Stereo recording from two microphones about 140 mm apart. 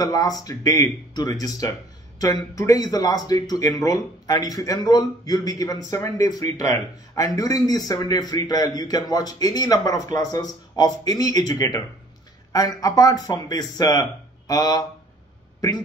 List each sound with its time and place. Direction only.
0.0 s speech: 25° left (ahead or behind)
12.5 s speech: 25° left (ahead or behind)